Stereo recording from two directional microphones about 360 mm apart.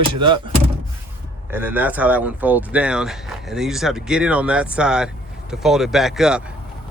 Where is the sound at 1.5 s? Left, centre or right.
Centre.